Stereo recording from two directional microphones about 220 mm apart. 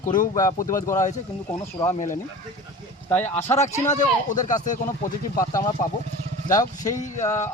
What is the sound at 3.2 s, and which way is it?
Speech, 10° left (ahead or behind).